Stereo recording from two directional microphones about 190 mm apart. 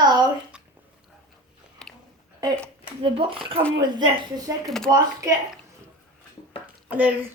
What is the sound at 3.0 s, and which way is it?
A woman's voice, 30° right (ahead or behind).